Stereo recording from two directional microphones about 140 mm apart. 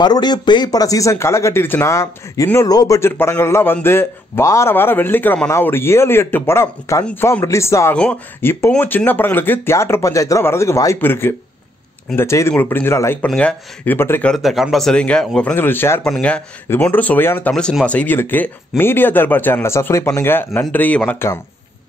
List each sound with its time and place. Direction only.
0.0 s speech: 30° left (ahead or behind)
14.3 s speech: centre (ahead or behind)
15.5 s speech: 15° left (ahead or behind)